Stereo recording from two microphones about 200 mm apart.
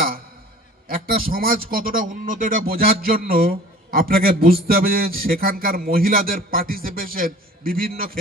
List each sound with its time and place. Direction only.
0.8 s a man's voice: 45° right (ahead or behind)